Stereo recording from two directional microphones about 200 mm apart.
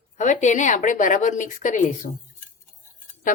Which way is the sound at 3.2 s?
40° left (ahead or behind).